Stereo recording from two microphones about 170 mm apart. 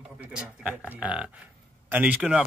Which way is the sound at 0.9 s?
5° right (ahead or behind).